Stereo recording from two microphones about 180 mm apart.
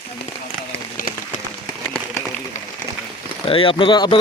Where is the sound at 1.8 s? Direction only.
10° left (ahead or behind).